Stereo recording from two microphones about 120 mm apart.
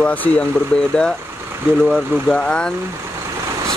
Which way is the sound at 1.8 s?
10° left (ahead or behind).